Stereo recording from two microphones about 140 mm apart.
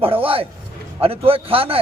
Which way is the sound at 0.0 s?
40° right (ahead or behind).